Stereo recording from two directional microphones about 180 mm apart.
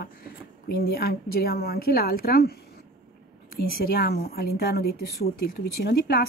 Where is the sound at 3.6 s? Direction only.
55° left (ahead or behind).